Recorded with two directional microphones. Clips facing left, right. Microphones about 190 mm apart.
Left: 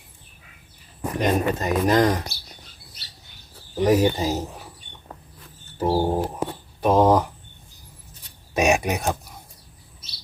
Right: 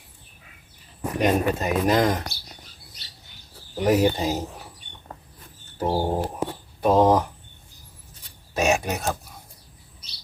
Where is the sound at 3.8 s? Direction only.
Centre (ahead or behind).